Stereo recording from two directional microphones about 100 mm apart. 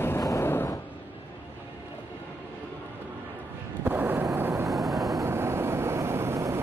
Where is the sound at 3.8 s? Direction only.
20° right (ahead or behind).